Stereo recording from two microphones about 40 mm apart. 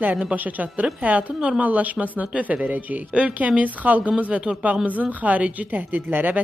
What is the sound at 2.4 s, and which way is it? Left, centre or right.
A woman's voice, right.